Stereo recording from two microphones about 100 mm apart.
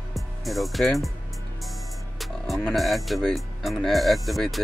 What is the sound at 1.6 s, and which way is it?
Speech, centre (ahead or behind).